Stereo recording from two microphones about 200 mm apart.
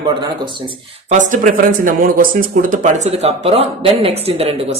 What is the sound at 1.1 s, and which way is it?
Speech, 40° right (ahead or behind).